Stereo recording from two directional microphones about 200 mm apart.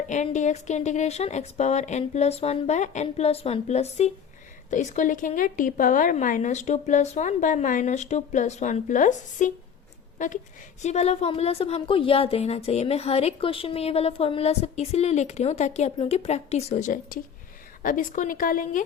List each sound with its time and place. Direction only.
0.1 s a woman's voice: 35° left (ahead or behind)